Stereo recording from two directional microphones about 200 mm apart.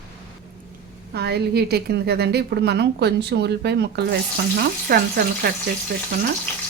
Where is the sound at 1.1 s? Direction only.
55° right (ahead or behind).